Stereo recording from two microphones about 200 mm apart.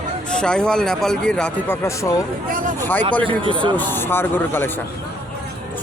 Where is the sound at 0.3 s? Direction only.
5° left (ahead or behind).